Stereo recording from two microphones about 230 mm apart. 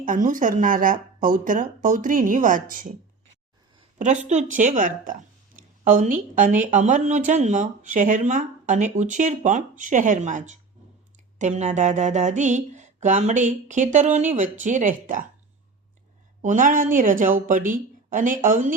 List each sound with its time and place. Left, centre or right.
0.0 s speech: right
3.9 s speech: right
16.4 s speech: right